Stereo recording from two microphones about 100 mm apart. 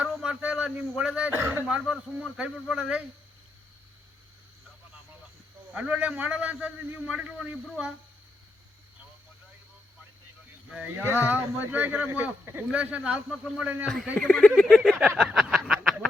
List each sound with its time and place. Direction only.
0.6 s a man's voice: 10° right (ahead or behind)
1.6 s a man's voice: 5° right (ahead or behind)
5.7 s a man's voice: 10° right (ahead or behind)
10.7 s a man's voice: 15° right (ahead or behind)